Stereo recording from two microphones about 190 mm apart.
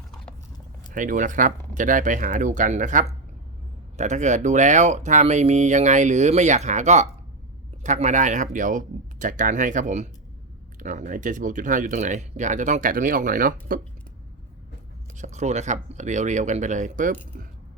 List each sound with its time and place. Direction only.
0.9 s speech: 45° right (ahead or behind)
15.2 s speech: 35° right (ahead or behind)